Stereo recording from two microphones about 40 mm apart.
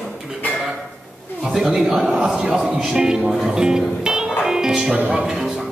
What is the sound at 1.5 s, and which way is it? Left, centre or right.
Speech, centre.